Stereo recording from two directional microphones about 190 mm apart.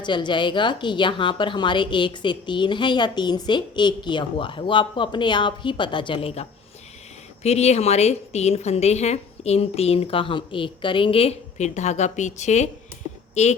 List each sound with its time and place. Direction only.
0.0 s a woman's voice: 25° left (ahead or behind)